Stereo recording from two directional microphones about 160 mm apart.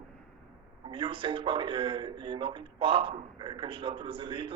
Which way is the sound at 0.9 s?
30° right (ahead or behind).